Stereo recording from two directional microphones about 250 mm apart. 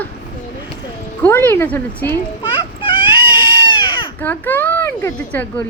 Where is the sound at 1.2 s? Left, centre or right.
Centre.